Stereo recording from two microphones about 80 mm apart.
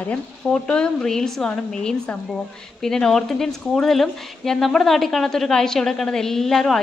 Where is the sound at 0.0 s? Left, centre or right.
Centre.